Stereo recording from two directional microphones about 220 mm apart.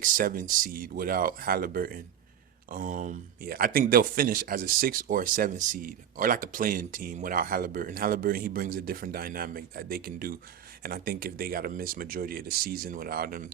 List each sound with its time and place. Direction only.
0.0 s speech: 40° right (ahead or behind)